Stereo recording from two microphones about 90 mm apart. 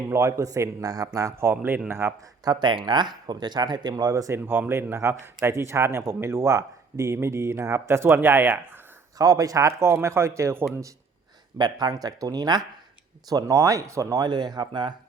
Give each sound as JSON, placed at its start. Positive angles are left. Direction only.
{"t": 0.1, "sound": "a man's voice", "side_deg": -35}
{"t": 2.4, "sound": "speech", "side_deg": -55}
{"t": 4.4, "sound": "speech", "side_deg": -20}
{"t": 9.1, "sound": "a man's voice", "side_deg": -40}
{"t": 11.5, "sound": "a man's voice", "side_deg": -50}
{"t": 14.3, "sound": "speech", "side_deg": -50}